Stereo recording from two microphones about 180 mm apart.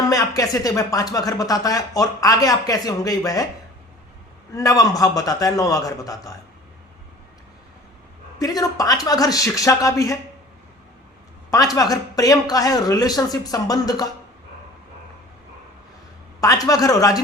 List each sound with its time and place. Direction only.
0.1 s speech: 20° left (ahead or behind)
4.5 s speech: 20° left (ahead or behind)
8.4 s speech: 20° left (ahead or behind)
11.5 s speech: 20° left (ahead or behind)
16.4 s speech: 20° left (ahead or behind)